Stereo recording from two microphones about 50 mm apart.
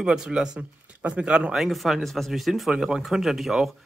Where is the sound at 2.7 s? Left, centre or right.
Centre.